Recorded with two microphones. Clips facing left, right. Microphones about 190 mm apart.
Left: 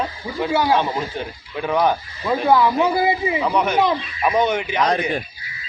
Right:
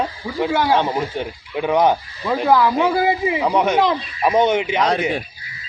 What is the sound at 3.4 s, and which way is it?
Speech, 20° right (ahead or behind).